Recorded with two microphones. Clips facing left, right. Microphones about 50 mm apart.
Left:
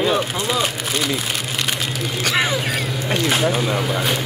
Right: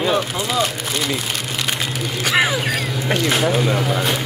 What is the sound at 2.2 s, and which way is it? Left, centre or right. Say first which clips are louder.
Crow: right 2 dB; centre.